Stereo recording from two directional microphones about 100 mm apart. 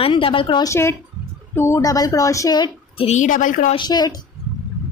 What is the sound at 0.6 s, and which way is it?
Speech, 30° left (ahead or behind).